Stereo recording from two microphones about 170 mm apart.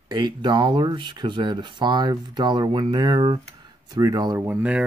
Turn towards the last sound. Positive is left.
turn(degrees=-10)  # may be behind; listen again after turning